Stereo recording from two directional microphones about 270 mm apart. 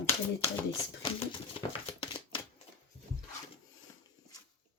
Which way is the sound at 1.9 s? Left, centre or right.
Centre.